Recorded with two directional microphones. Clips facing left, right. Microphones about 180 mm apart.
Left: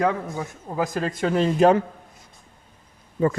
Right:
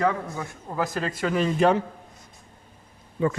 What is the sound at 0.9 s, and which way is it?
Speech, centre (ahead or behind).